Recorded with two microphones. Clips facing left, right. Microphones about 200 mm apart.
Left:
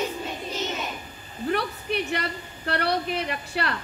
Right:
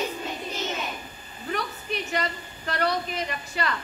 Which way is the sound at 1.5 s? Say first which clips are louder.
Left 3 dB; 60° left (ahead or behind).